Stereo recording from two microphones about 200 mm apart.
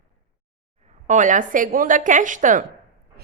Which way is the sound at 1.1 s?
40° right (ahead or behind).